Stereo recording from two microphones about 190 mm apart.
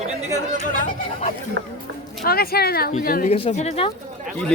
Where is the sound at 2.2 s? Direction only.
55° left (ahead or behind).